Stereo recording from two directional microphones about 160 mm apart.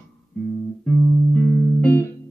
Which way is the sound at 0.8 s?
10° left (ahead or behind).